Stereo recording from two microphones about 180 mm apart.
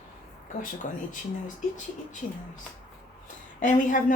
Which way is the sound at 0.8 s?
45° left (ahead or behind).